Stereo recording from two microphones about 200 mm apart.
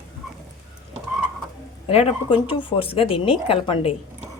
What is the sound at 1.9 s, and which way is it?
Speech, 30° left (ahead or behind).